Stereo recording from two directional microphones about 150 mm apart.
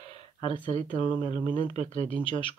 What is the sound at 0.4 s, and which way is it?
Speech, 35° left (ahead or behind).